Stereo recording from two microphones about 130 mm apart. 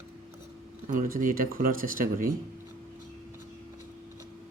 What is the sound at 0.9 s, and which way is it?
Speech, 90° right.